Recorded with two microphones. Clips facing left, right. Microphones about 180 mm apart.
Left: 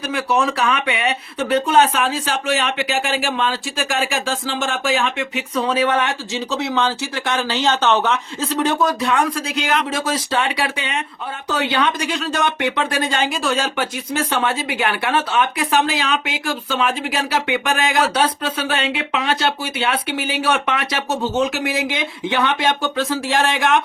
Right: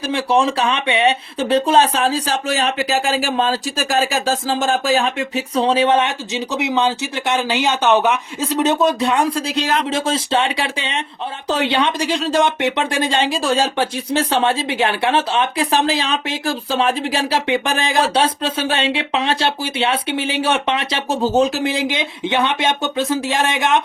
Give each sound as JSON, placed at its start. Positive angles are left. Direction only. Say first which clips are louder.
{"t": 0.1, "sound": "speech", "louder": "right 3 dB", "side_deg": -30}